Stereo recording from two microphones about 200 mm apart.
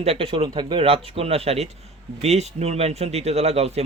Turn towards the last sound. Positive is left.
turn(degrees=-30)  # may be behind; listen again after turning